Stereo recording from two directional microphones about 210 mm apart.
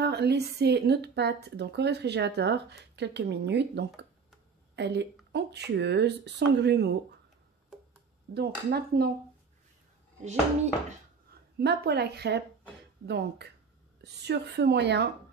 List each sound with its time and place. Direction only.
0.0 s speech: 50° right (ahead or behind)
8.4 s speech: 50° right (ahead or behind)
11.5 s speech: 50° right (ahead or behind)